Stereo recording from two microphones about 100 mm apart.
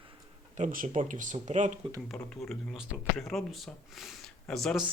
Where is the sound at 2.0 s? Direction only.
5° left (ahead or behind).